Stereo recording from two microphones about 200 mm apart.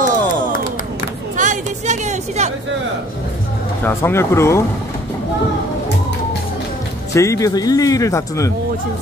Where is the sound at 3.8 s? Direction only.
15° left (ahead or behind).